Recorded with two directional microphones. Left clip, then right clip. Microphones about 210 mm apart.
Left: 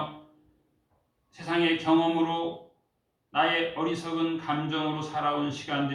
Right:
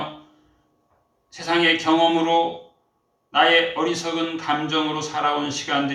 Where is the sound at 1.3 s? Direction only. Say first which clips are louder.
Right 7 dB; 40° right (ahead or behind).